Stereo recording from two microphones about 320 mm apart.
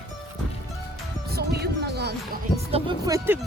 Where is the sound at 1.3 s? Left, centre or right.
Right.